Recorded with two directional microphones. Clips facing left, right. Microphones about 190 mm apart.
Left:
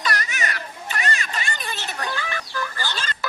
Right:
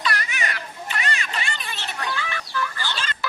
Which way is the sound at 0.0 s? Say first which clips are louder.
Even; 45° left (ahead or behind).